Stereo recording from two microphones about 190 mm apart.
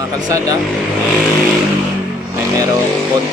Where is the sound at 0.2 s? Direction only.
20° right (ahead or behind).